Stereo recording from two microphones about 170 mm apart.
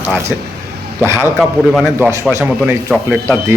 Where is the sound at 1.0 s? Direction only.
15° right (ahead or behind).